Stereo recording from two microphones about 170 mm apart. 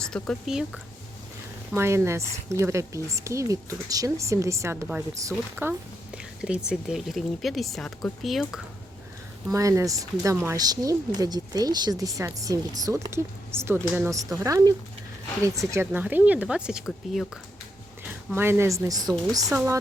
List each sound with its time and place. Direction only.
0.0 s speech: 5° left (ahead or behind)
1.7 s speech: 15° right (ahead or behind)
6.4 s speech: 5° right (ahead or behind)
9.5 s speech: 20° right (ahead or behind); by 17.4 s centre (ahead or behind)
18.3 s speech: 15° right (ahead or behind)